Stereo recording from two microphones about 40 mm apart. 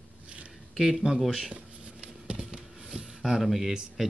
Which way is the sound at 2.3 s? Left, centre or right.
Right.